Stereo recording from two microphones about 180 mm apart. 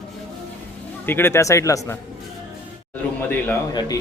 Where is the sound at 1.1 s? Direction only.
10° left (ahead or behind).